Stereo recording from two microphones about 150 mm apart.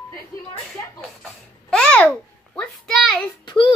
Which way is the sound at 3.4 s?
30° left (ahead or behind).